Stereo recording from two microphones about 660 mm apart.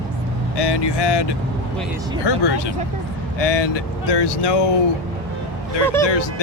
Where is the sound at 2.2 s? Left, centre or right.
Left.